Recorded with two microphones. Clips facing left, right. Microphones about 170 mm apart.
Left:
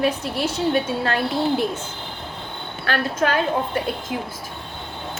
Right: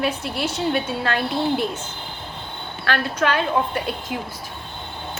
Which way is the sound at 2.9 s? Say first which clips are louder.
Even; 40° left (ahead or behind).